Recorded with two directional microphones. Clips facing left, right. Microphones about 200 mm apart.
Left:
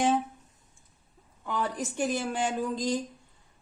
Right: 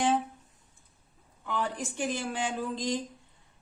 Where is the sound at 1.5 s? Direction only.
40° left (ahead or behind).